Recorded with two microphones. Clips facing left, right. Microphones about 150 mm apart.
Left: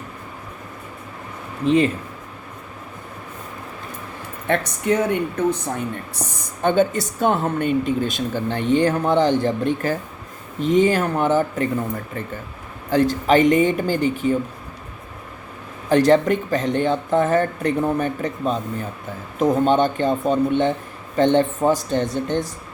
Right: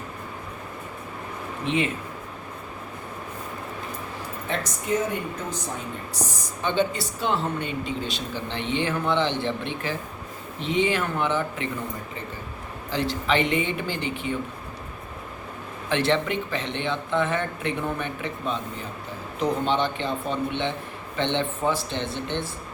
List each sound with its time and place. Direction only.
1.6 s speech: 40° left (ahead or behind)
4.4 s speech: 60° left (ahead or behind); by 11.7 s 45° left (ahead or behind)
12.9 s speech: 45° left (ahead or behind)
15.9 s speech: 40° left (ahead or behind)